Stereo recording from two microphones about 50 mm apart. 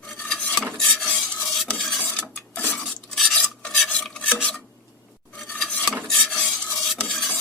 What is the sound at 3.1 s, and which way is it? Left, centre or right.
Filing, centre.